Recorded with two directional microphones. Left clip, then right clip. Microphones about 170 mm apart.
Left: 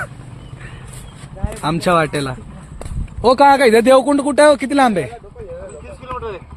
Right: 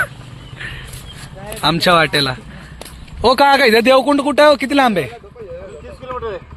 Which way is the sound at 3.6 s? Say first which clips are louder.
Even; 5° left (ahead or behind).